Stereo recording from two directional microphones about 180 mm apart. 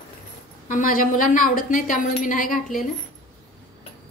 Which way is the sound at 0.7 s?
50° left (ahead or behind).